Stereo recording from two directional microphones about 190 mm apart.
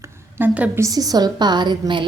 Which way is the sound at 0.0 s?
15° right (ahead or behind).